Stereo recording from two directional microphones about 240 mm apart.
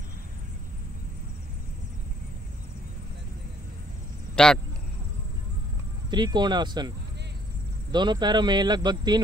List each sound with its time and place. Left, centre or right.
4.4 s speech: centre
6.0 s speech: centre
7.9 s speech: centre